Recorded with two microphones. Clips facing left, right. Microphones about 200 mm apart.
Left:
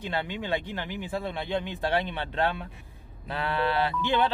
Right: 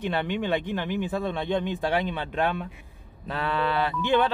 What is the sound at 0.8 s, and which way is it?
Speech, 15° left (ahead or behind).